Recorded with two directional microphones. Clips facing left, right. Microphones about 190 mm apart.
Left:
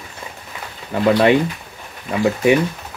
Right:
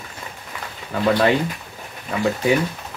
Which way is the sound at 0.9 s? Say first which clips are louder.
Left 4 dB; 20° left (ahead or behind).